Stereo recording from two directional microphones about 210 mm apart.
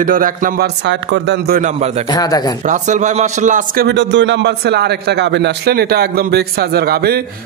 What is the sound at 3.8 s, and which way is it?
A man's voice, 55° right (ahead or behind).